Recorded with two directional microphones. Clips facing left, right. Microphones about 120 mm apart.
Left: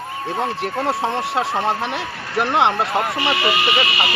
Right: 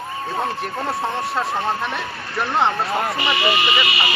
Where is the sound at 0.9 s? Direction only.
25° left (ahead or behind).